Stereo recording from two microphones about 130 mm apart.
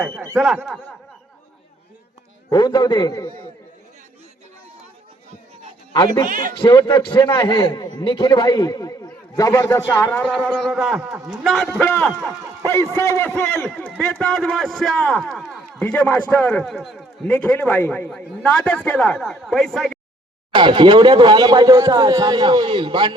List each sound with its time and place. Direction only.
0.3 s a man's voice: centre (ahead or behind)
2.5 s a man's voice: 30° left (ahead or behind)
5.9 s a man's voice: 35° left (ahead or behind)
6.2 s a man's voice: 90° right
6.5 s a man's voice: 35° left (ahead or behind)
10.2 s a man's voice: 5° left (ahead or behind)
11.8 s a man's voice: 15° left (ahead or behind)
15.8 s a man's voice: 10° left (ahead or behind)
20.5 s speech: 40° right (ahead or behind)